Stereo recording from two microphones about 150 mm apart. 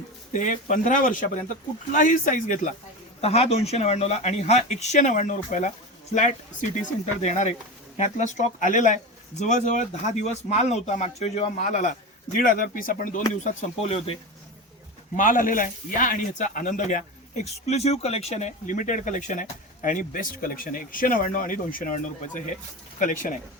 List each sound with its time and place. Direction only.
0.3 s speech: 55° left (ahead or behind)
3.2 s speech: 40° left (ahead or behind)
12.4 s speech: 65° left (ahead or behind)
13.4 s speech: 55° left (ahead or behind)
15.1 s speech: 65° left (ahead or behind)
17.4 s speech: 45° left (ahead or behind); by 23.4 s 60° left (ahead or behind)